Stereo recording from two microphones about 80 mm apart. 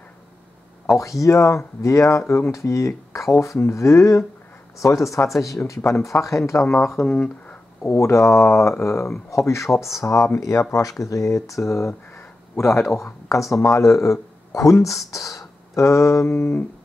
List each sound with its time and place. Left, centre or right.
1.2 s speech: left
6.7 s speech: centre
7.8 s speech: left
15.0 s a sound: left